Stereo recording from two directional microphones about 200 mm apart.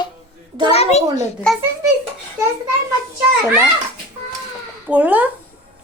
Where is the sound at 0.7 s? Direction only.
30° left (ahead or behind).